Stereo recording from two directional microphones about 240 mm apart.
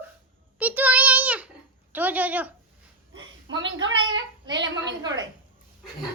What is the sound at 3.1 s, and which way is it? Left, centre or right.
A woman's voice, right.